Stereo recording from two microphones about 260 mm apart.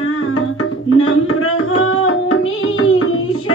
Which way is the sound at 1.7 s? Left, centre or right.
Left.